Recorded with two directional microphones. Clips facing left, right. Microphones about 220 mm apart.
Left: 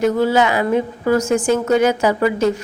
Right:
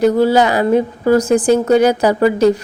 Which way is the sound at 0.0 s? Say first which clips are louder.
Right 4 dB; 35° right (ahead or behind).